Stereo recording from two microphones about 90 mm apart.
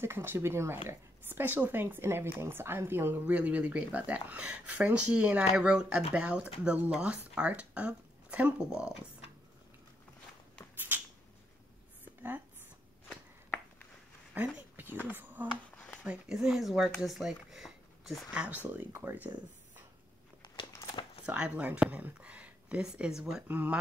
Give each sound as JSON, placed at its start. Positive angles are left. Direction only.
{"t": 0.0, "sound": "speech", "side_deg": -25}
{"t": 10.9, "sound": "a sound", "side_deg": -20}
{"t": 14.3, "sound": "a sound", "side_deg": -20}
{"t": 16.0, "sound": "speech", "side_deg": -10}
{"t": 17.0, "sound": "a sound", "side_deg": -5}
{"t": 18.3, "sound": "speech", "side_deg": -15}
{"t": 18.7, "sound": "speech", "side_deg": -25}
{"t": 21.3, "sound": "speech", "side_deg": -15}
{"t": 23.4, "sound": "speech", "side_deg": -20}